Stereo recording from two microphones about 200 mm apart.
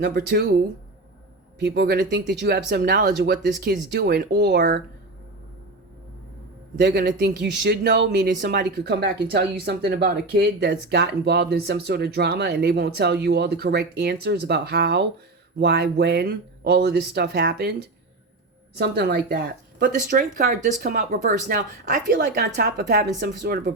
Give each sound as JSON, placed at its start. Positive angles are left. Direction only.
{"t": 0.0, "sound": "speech", "side_deg": -50}
{"t": 1.5, "sound": "speech", "side_deg": -55}
{"t": 6.7, "sound": "speech", "side_deg": -60}
{"t": 18.8, "sound": "speech", "side_deg": -55}